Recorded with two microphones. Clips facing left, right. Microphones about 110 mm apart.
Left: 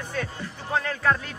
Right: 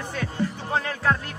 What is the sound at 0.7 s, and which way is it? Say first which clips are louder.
Speech: left 1 dB; 10° right (ahead or behind).